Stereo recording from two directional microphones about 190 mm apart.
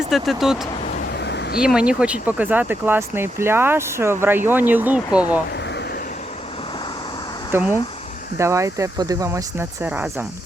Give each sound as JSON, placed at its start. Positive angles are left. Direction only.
{"t": 0.1, "sound": "speech", "side_deg": 0}
{"t": 1.1, "sound": "a sound", "side_deg": 60}
{"t": 1.6, "sound": "speech", "side_deg": -5}
{"t": 7.5, "sound": "speech", "side_deg": -10}